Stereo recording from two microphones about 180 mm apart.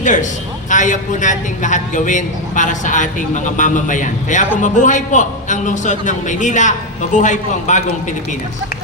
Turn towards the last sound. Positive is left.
turn(degrees=40)  # may be behind; listen again after turning